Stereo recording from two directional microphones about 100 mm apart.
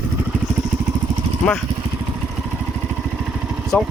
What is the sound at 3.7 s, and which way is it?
Speech, 10° left (ahead or behind).